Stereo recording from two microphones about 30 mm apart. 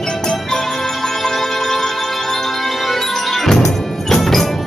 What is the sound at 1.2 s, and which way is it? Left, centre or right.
Music, centre.